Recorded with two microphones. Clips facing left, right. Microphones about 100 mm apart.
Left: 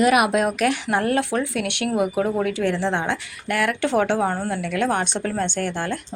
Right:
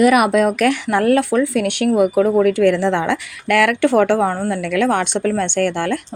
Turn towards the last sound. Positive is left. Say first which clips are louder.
# right 7 dB
turn(degrees=-65)  # may be behind; listen again after turning